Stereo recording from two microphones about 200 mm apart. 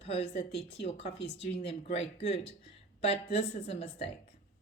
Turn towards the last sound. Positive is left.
turn(degrees=30)  # may be behind; listen again after turning